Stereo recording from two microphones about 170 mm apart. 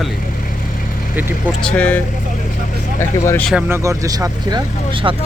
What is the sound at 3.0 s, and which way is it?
Speech, 15° left (ahead or behind).